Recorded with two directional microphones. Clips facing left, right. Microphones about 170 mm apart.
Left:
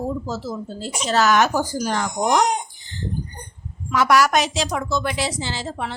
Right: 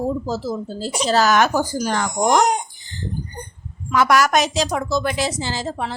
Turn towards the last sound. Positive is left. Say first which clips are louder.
# right 3 dB
turn(degrees=-40)  # may be behind; listen again after turning